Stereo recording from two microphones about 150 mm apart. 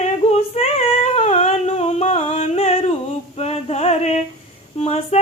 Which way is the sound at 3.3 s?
45° left (ahead or behind).